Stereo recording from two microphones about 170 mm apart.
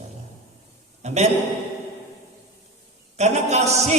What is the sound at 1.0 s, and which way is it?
Speech, 40° right (ahead or behind).